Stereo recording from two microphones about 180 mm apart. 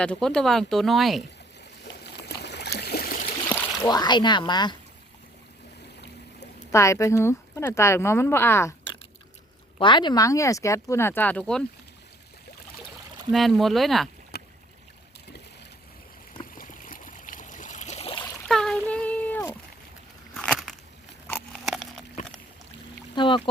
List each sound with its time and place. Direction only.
0.0 s speech: 5° left (ahead or behind)
1.8 s stream: 65° left (ahead or behind)
3.8 s speech: 25° left (ahead or behind)
6.7 s speech: 15° left (ahead or behind)
9.7 s speech: 25° left (ahead or behind); by 11.6 s 5° left (ahead or behind)
13.3 s speech: centre (ahead or behind)
14.3 s boat: 60° left (ahead or behind)
16.6 s stream: 50° left (ahead or behind); by 18.3 s 30° left (ahead or behind)
18.4 s a sound: centre (ahead or behind)
23.1 s pour: 25° left (ahead or behind)